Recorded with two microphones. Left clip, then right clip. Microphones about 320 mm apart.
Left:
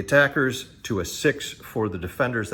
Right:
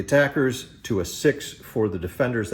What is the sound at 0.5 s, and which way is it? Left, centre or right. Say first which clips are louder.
Speech: right 1 dB; centre.